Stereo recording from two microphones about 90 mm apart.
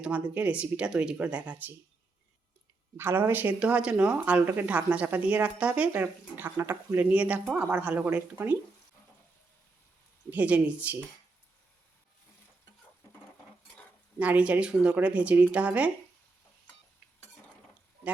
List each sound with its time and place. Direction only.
0.0 s speech: 15° right (ahead or behind)
3.0 s speech: 25° right (ahead or behind)
10.2 s speech: 15° right (ahead or behind)
14.2 s speech: 15° right (ahead or behind)